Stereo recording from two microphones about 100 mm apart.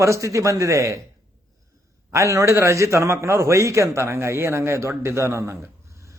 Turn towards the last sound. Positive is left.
turn(degrees=-30)  # may be behind; listen again after turning